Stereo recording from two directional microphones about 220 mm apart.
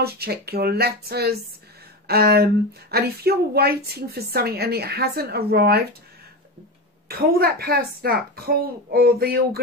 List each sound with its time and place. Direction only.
0.0 s speech: 45° right (ahead or behind)
7.1 s speech: 45° right (ahead or behind)